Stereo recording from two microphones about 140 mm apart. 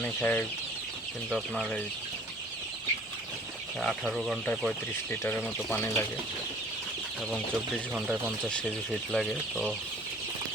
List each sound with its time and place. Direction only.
0.0 s chicken: 10° left (ahead or behind)
1.3 s speech: 5° left (ahead or behind)
3.8 s speech: centre (ahead or behind)
5.7 s speech: 15° left (ahead or behind)
7.9 s speech: 5° right (ahead or behind)
8.4 s speech: 5° left (ahead or behind)